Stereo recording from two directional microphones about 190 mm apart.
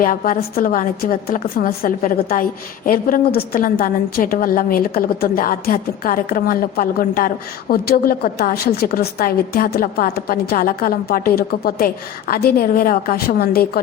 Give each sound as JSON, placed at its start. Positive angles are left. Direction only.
{"t": 0.0, "sound": "a woman's voice", "side_deg": 45}